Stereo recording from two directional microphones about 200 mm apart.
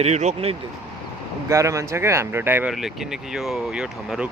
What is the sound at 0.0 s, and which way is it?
Speech, 35° right (ahead or behind).